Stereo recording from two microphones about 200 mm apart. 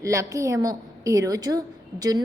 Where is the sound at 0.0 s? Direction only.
15° right (ahead or behind).